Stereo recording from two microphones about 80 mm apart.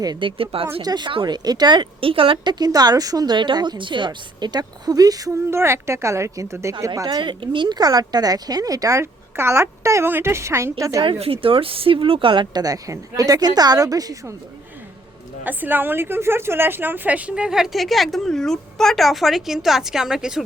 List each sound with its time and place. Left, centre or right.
0.0 s a woman's voice: right
0.8 s speech: right
3.3 s speech: right
5.3 s a woman's voice: right
6.8 s a woman's voice: right
7.2 s speech: right
9.3 s a woman's voice: right
11.0 s a woman's voice: right
12.6 s a woman's voice: right
15.4 s a woman's voice: right; by 20.4 s centre